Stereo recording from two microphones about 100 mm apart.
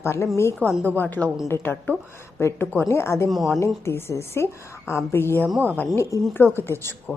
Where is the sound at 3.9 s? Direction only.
25° left (ahead or behind).